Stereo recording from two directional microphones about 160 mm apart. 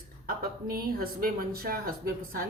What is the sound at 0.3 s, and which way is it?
Speech, 65° right (ahead or behind).